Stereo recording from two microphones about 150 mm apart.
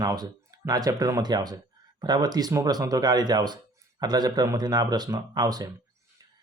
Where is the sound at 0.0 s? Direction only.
25° right (ahead or behind).